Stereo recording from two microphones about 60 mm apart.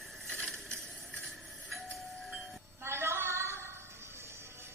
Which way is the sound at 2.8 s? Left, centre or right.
Right.